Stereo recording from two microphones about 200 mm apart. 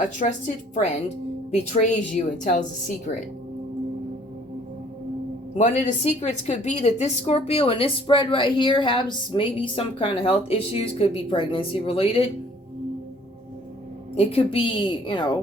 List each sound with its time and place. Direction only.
0.0 s a woman's voice: 40° left (ahead or behind)
5.5 s a woman's voice: 35° left (ahead or behind)
14.2 s a woman's voice: 30° left (ahead or behind)